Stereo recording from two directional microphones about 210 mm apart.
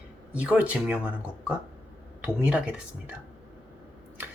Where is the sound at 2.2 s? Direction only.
5° right (ahead or behind).